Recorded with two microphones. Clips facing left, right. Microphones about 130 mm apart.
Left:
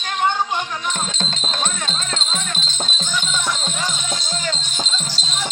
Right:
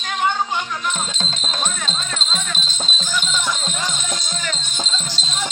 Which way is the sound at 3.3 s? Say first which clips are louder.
Even; centre (ahead or behind).